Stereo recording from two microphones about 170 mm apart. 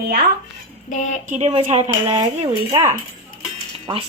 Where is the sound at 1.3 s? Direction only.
40° right (ahead or behind).